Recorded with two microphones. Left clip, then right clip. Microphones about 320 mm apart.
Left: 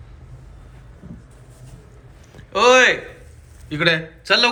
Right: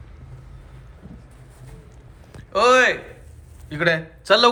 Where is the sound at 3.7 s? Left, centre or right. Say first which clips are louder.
Left 2 dB; centre.